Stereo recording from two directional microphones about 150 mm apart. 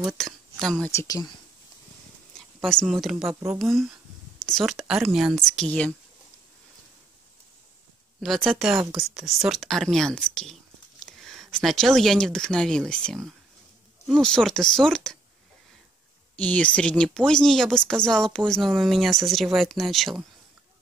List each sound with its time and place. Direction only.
0.0 s speech: 5° left (ahead or behind)
0.9 s speech: 25° left (ahead or behind)
2.3 s speech: 5° left (ahead or behind)
4.5 s speech: centre (ahead or behind)
8.2 s speech: centre (ahead or behind)
16.3 s speech: 10° left (ahead or behind)